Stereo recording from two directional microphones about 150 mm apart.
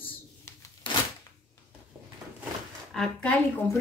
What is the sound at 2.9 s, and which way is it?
Speech, 5° left (ahead or behind).